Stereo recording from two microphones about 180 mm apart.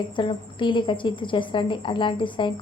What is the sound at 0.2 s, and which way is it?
A woman's voice, 25° left (ahead or behind).